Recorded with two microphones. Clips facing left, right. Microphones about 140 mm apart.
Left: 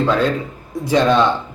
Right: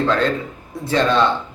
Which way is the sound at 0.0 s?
10° left (ahead or behind).